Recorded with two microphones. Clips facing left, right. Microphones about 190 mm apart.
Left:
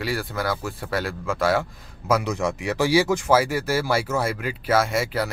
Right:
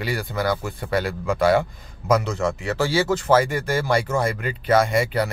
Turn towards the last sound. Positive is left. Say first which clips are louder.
# right 3 dB
turn(degrees=5)  # may be behind; listen again after turning